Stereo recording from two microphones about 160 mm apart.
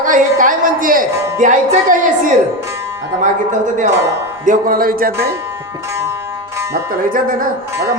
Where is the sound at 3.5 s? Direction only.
50° right (ahead or behind); by 5.3 s 75° right (ahead or behind).